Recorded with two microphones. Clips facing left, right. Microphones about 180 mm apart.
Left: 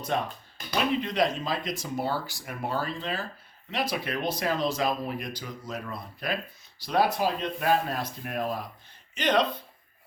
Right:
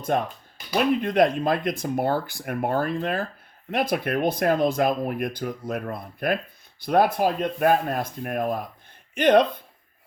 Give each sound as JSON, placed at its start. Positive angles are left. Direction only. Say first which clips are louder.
{"t": 0.1, "sound": "speech", "louder": "right 4 dB", "side_deg": -50}